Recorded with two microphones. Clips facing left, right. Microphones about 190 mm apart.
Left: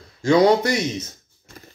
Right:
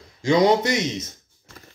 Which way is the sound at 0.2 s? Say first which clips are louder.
Left 2 dB; 20° right (ahead or behind).